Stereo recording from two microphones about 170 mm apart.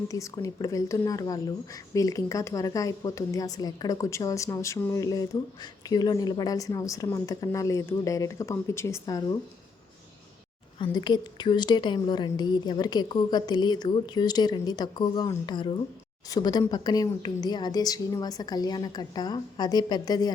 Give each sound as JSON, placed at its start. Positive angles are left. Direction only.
{"t": 0.1, "sound": "speech", "side_deg": 20}
{"t": 10.9, "sound": "speech", "side_deg": 25}